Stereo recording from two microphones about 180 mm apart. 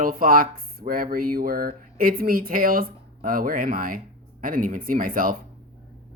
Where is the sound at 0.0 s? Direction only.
50° right (ahead or behind).